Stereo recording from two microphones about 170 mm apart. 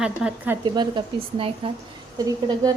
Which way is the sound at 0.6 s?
25° right (ahead or behind).